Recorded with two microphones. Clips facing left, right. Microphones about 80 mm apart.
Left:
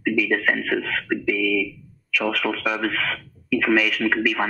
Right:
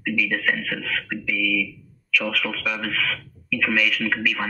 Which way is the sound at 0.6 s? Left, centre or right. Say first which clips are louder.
Left 4 dB; centre.